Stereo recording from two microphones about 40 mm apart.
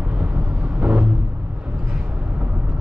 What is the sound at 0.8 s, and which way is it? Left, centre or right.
Vehicle, right.